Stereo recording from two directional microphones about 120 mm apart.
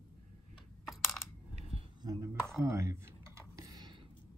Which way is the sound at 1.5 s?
55° right (ahead or behind).